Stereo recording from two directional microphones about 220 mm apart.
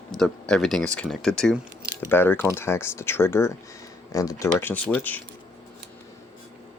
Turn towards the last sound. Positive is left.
turn(degrees=10)  # may be behind; listen again after turning